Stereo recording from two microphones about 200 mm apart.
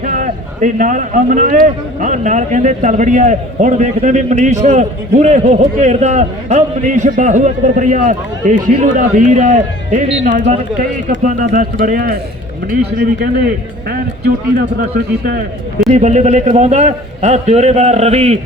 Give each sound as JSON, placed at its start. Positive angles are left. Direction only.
{"t": 0.0, "sound": "a man's voice", "side_deg": -40}
{"t": 15.9, "sound": "a man's voice", "side_deg": -35}